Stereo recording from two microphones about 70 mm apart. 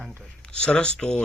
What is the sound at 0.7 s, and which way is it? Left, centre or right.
Speech, centre.